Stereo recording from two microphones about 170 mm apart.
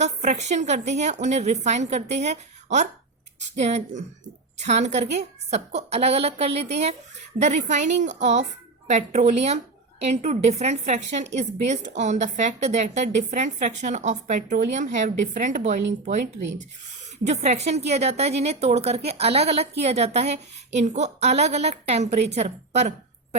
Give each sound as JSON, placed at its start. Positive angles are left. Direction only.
{"t": 0.0, "sound": "a woman's voice", "side_deg": -45}